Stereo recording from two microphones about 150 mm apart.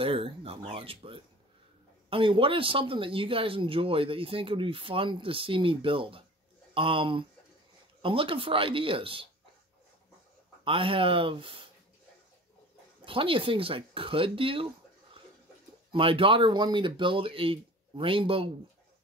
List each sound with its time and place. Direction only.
0.0 s speech: 35° right (ahead or behind)
10.6 s speech: 35° right (ahead or behind)
13.0 s speech: 35° right (ahead or behind)
15.9 s speech: 35° right (ahead or behind)